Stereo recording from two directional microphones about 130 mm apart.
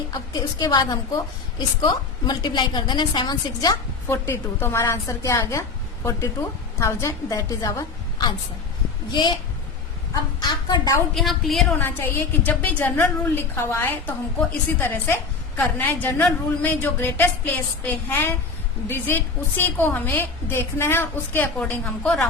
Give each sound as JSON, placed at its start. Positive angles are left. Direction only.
{"t": 0.1, "sound": "a woman's voice", "side_deg": 30}
{"t": 4.1, "sound": "a woman's voice", "side_deg": 20}
{"t": 9.2, "sound": "a woman's voice", "side_deg": 35}
{"t": 10.4, "sound": "a woman's voice", "side_deg": 35}
{"t": 11.1, "sound": "a woman's voice", "side_deg": 0}
{"t": 11.8, "sound": "a woman's voice", "side_deg": 15}